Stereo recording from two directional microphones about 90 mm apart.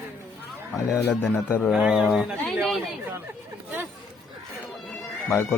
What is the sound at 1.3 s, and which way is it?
Speech, 20° left (ahead or behind).